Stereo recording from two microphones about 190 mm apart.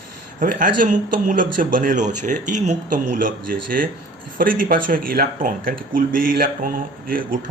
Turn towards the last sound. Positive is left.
turn(degrees=-45)  # may be behind; listen again after turning